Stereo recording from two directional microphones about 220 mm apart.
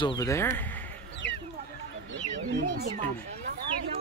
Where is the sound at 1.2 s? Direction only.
50° left (ahead or behind).